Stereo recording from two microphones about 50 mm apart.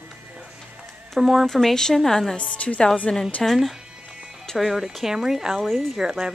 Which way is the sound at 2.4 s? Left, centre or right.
Left.